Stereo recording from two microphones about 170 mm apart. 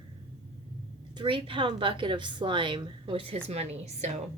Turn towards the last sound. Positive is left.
turn(degrees=-40)  # may be behind; listen again after turning